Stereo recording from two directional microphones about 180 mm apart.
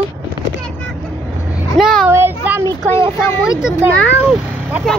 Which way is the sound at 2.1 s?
10° right (ahead or behind).